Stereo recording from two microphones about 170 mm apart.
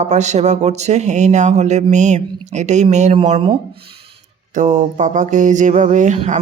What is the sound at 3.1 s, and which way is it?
Speech, 35° right (ahead or behind).